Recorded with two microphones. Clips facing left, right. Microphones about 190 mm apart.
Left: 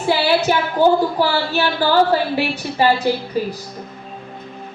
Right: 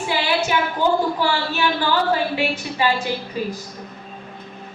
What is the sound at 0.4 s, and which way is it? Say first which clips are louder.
A woman's voice: left 5 dB; 40° left (ahead or behind).